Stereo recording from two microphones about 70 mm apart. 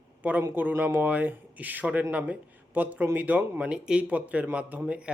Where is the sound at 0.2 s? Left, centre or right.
Right.